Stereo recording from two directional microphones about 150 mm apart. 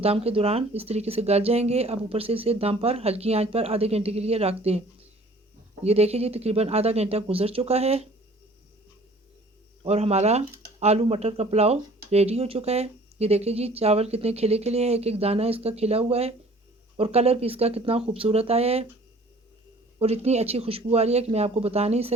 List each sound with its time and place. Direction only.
0.0 s speech: 40° right (ahead or behind)
5.8 s speech: 45° right (ahead or behind)
9.8 s speech: 45° right (ahead or behind)
20.0 s speech: 45° right (ahead or behind)